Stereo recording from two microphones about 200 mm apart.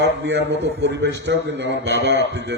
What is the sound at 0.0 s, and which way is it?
A man's voice, 65° right (ahead or behind).